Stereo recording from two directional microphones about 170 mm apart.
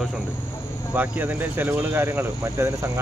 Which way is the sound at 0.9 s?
10° right (ahead or behind).